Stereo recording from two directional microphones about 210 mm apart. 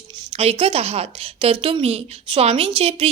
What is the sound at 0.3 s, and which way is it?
A woman's voice, 30° right (ahead or behind).